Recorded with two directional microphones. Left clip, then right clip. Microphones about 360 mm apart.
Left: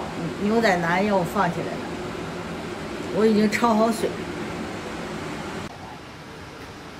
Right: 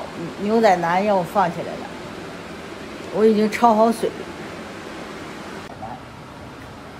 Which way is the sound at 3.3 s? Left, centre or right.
Centre.